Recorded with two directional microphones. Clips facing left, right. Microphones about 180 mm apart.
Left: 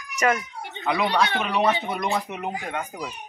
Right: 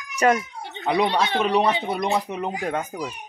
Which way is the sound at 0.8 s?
30° right (ahead or behind).